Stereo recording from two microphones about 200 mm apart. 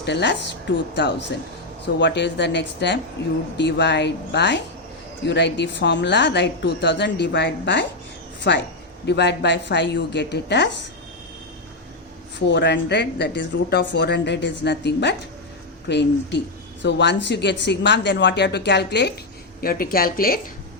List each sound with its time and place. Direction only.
0.0 s a woman's voice: 60° left (ahead or behind)
2.0 s a woman's voice: 60° left (ahead or behind)
12.5 s a woman's voice: 60° left (ahead or behind)
19.6 s speech: 45° left (ahead or behind)